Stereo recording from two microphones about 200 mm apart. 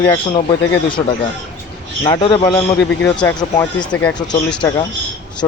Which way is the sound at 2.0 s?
25° left (ahead or behind).